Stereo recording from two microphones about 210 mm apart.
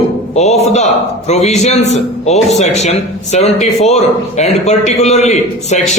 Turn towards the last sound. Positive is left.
turn(degrees=35)  # may be behind; listen again after turning